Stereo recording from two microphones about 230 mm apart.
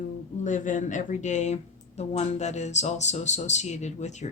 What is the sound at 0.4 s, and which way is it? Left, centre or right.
Speech, left.